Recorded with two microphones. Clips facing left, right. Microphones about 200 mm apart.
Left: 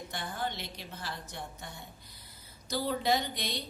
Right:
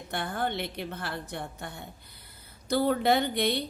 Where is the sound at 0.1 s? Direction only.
60° right (ahead or behind).